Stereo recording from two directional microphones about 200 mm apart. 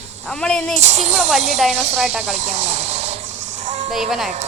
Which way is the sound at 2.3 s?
35° right (ahead or behind).